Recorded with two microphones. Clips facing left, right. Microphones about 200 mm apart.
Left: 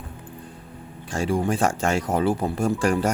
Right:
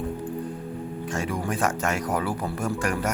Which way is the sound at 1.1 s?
30° left (ahead or behind).